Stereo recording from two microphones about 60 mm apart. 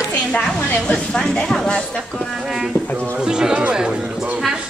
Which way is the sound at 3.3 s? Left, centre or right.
Centre.